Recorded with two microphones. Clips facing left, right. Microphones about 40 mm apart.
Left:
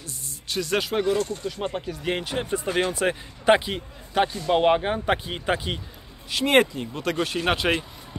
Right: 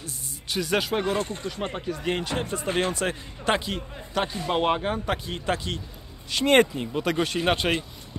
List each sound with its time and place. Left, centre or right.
0.0 s a sound: centre
1.0 s speech: right
1.9 s a man's voice: centre
6.3 s speech: centre
6.7 s speech: centre